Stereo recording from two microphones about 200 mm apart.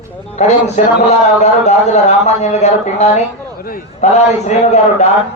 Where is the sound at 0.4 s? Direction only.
35° left (ahead or behind).